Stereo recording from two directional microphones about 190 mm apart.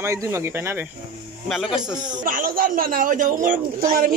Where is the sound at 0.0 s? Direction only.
15° right (ahead or behind).